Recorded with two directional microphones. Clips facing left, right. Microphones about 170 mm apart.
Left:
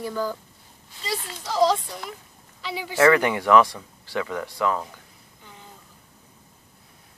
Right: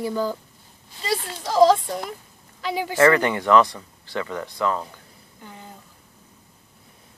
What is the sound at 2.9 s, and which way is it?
Speech, 10° left (ahead or behind).